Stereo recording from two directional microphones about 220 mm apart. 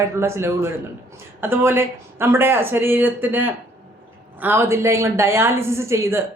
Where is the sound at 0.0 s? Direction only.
10° right (ahead or behind).